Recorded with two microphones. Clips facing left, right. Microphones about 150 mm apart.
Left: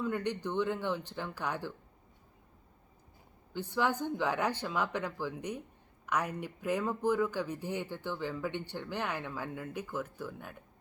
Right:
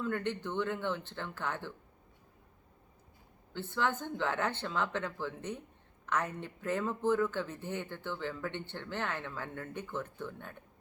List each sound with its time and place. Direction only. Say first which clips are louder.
0.0 s speech: left 1 dB; 15° left (ahead or behind)
3.5 s a woman's voice: left 2 dB; 15° left (ahead or behind)